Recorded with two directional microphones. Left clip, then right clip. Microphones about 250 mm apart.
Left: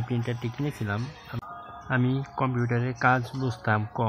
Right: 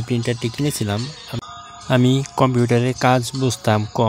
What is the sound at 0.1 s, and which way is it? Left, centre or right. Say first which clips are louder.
Speech: right 11 dB; right.